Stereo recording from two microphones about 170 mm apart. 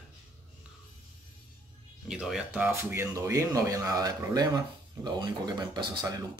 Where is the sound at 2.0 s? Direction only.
5° right (ahead or behind).